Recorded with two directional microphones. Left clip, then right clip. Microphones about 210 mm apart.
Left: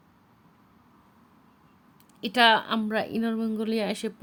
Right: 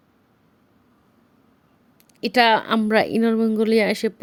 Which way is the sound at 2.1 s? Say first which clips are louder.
Right 4 dB; 25° right (ahead or behind).